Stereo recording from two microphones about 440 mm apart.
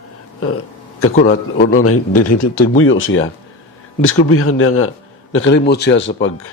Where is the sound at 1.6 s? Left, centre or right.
Centre.